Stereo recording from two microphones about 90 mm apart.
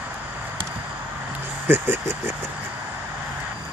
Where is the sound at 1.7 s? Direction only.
25° right (ahead or behind).